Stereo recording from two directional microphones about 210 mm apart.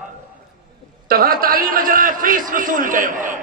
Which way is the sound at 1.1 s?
45° right (ahead or behind).